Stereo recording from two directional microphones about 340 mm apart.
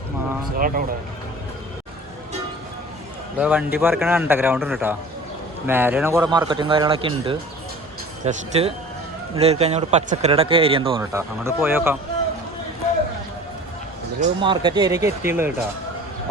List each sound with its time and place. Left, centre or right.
0.5 s speech: right
3.4 s speech: centre
14.2 s speech: centre